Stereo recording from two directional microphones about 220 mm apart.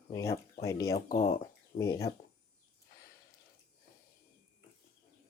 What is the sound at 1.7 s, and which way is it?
Speech, 35° left (ahead or behind).